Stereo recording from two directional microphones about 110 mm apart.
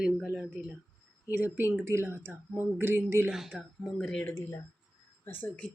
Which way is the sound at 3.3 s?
5° right (ahead or behind).